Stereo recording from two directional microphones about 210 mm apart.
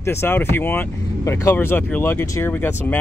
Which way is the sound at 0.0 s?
10° left (ahead or behind).